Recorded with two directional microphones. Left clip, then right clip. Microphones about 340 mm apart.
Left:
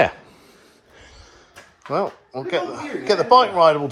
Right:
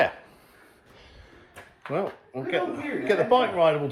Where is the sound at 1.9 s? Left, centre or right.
Centre.